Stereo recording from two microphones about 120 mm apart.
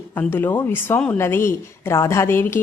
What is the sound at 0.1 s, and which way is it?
Speech, 15° left (ahead or behind).